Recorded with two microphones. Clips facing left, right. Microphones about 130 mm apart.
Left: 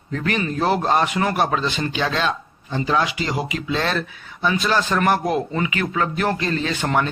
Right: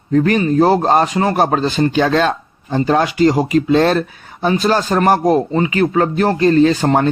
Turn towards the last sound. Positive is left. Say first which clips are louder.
# right 9 dB
turn(degrees=-40)  # may be behind; listen again after turning